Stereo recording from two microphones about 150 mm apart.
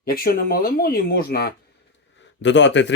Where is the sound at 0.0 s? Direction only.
80° left.